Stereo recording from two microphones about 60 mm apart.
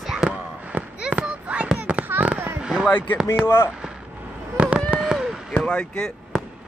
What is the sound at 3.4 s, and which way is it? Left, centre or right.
Speech, left.